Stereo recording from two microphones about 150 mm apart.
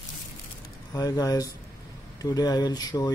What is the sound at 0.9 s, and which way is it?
Speech, 25° left (ahead or behind).